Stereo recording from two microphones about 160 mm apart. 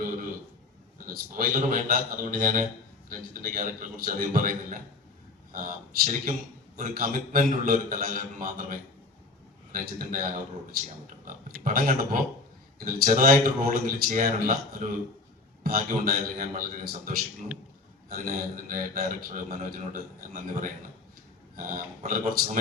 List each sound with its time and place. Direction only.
0.9 s a man's voice: 65° right (ahead or behind)